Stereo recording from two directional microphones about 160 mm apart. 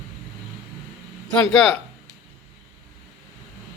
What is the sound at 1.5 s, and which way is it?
Speech, centre (ahead or behind).